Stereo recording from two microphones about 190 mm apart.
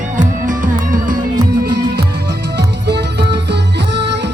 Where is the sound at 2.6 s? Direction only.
60° right (ahead or behind).